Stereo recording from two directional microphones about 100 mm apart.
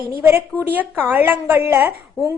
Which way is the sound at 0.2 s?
25° right (ahead or behind).